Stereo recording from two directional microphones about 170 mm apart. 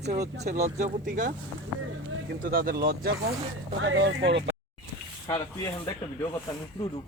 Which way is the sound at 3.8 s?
90° right.